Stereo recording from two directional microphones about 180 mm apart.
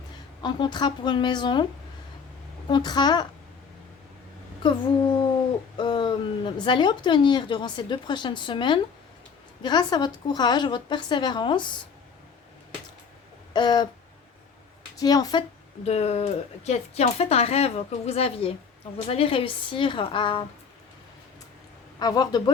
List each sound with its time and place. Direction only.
0.4 s speech: 25° left (ahead or behind)
2.6 s speech: 25° left (ahead or behind)
4.6 s speech: 25° left (ahead or behind)
13.5 s a sound: 25° left (ahead or behind)
14.9 s speech: 20° left (ahead or behind)
15.8 s a woman's voice: 35° left (ahead or behind)
21.9 s a woman's voice: 20° left (ahead or behind)